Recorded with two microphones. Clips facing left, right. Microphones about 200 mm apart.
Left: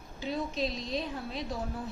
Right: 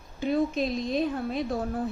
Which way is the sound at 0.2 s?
55° right (ahead or behind).